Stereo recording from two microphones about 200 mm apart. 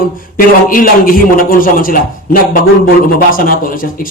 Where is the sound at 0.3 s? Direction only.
45° left (ahead or behind).